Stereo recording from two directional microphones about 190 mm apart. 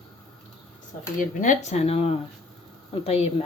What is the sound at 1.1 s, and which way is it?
Speech, 40° left (ahead or behind).